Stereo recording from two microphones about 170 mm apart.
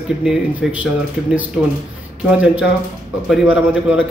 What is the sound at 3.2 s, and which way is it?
Speech, 5° right (ahead or behind).